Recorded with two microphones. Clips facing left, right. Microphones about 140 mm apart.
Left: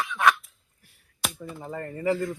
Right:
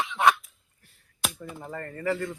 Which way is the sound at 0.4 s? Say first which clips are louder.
Even; centre (ahead or behind).